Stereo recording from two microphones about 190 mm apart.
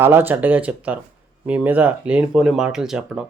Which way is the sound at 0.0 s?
10° right (ahead or behind).